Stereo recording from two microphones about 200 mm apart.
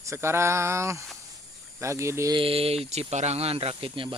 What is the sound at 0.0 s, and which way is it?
Mantra, 15° right (ahead or behind).